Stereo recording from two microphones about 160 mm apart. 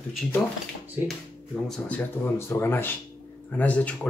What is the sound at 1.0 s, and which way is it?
Speech, 15° right (ahead or behind).